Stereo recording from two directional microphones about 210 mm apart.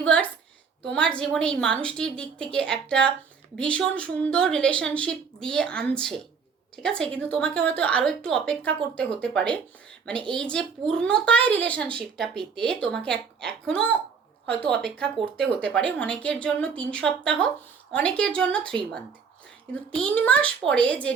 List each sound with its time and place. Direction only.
0.0 s a sound: 5° left (ahead or behind)
0.9 s speech: 5° left (ahead or behind)
20.0 s speech: 5° left (ahead or behind)